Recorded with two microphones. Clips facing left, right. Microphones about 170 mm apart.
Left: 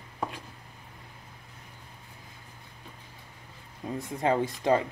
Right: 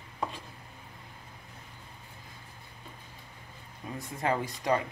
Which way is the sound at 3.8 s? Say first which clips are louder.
Left 5 dB; 25° left (ahead or behind).